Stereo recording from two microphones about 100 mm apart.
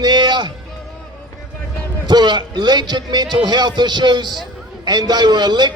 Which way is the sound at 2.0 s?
45° right (ahead or behind).